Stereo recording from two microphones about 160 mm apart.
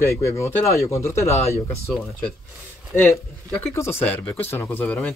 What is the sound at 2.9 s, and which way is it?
A man's voice, 10° left (ahead or behind).